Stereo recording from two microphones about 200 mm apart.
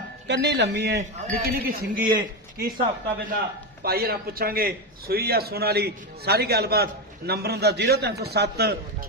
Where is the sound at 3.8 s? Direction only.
50° right (ahead or behind).